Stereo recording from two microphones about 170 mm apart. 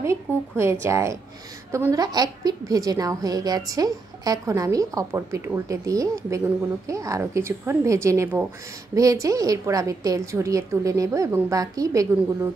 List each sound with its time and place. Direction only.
0.0 s a woman's voice: 15° right (ahead or behind)